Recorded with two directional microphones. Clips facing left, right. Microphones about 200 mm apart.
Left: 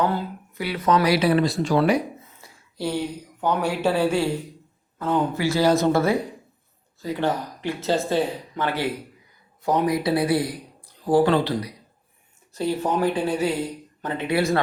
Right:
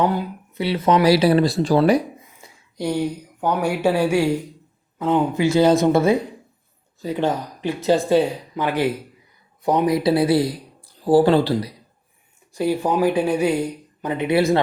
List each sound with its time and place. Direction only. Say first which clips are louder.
0.0 s speech: right 3 dB; 15° right (ahead or behind); by 2.0 s 35° right (ahead or behind)
2.2 s a man's voice: right 2 dB; 15° right (ahead or behind)
12.5 s speech: right 3 dB; 10° right (ahead or behind)